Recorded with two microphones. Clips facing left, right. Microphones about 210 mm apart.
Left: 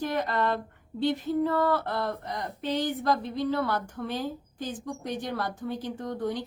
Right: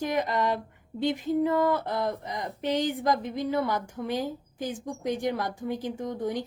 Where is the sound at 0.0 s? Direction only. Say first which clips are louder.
Right 1 dB; 10° right (ahead or behind).